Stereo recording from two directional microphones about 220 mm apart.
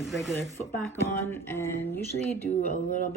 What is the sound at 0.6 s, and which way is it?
Speech, 10° left (ahead or behind).